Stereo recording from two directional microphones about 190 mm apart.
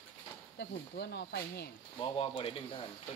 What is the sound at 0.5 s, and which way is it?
Speech, 60° left (ahead or behind).